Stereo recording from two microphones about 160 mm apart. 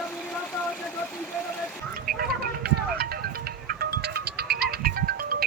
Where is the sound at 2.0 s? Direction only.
75° right (ahead or behind).